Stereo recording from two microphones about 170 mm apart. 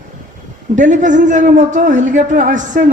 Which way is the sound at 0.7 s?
45° right (ahead or behind).